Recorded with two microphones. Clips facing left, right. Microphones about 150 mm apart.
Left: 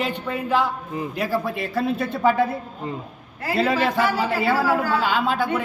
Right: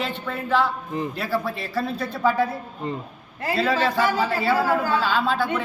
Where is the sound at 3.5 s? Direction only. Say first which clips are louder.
Left 1 dB; 20° left (ahead or behind).